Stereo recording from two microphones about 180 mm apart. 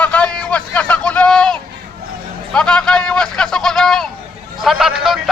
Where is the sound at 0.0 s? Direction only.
5° left (ahead or behind).